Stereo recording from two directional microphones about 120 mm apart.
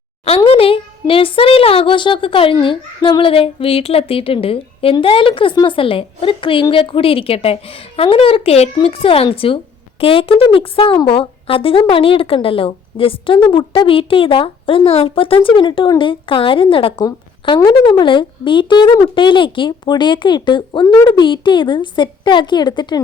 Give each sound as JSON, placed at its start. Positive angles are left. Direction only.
{"t": 0.3, "sound": "speech", "side_deg": 55}